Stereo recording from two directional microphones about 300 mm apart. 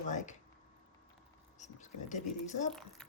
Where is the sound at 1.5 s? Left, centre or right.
Left.